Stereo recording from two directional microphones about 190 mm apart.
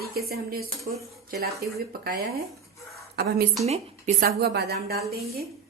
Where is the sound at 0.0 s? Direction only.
55° right (ahead or behind).